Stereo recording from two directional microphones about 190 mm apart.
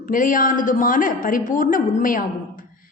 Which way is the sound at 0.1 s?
45° left (ahead or behind).